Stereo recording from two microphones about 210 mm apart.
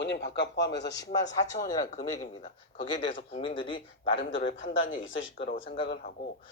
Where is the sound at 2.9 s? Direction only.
20° left (ahead or behind).